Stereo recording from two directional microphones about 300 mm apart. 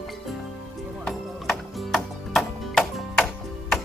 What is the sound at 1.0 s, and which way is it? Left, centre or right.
Music, centre.